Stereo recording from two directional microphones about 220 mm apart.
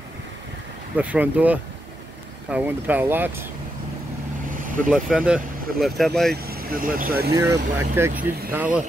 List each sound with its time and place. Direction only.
0.9 s speech: 5° right (ahead or behind)
4.8 s speech: 5° right (ahead or behind)
6.3 s speech: 45° right (ahead or behind)
7.3 s speech: 15° right (ahead or behind)